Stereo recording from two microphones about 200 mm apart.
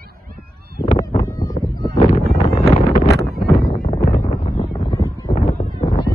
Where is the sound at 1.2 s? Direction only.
15° left (ahead or behind).